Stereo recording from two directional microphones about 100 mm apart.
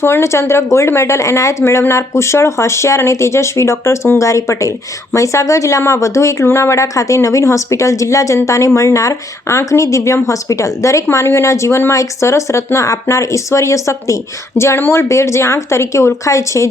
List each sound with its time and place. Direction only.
0.0 s speech: 25° left (ahead or behind)